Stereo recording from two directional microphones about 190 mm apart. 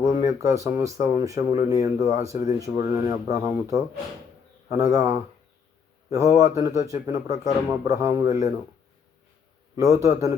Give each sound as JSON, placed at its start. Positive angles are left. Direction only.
{"t": 0.0, "sound": "a man's voice", "side_deg": -15}
{"t": 9.7, "sound": "a man's voice", "side_deg": -15}